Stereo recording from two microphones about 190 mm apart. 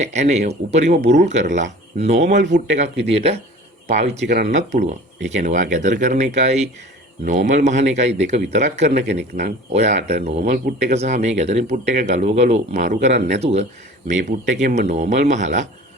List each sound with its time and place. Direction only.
0.0 s speech: 35° right (ahead or behind)
4.3 s speech: 60° right (ahead or behind)
4.5 s speech: 35° right (ahead or behind)